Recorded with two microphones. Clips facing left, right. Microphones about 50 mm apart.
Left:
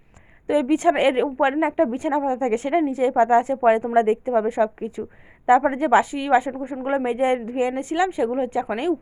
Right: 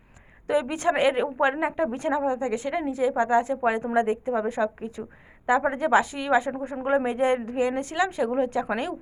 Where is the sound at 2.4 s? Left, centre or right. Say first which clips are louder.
Left 7 dB; left.